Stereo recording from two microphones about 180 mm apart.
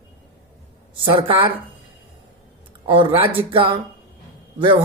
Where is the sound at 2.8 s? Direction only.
30° right (ahead or behind).